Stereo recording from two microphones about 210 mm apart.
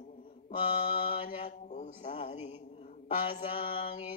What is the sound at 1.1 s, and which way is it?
Speech, 30° left (ahead or behind).